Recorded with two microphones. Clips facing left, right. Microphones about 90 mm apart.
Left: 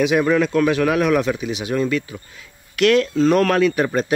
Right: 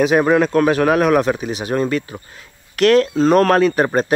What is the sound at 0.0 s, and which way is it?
Speech, 45° right (ahead or behind).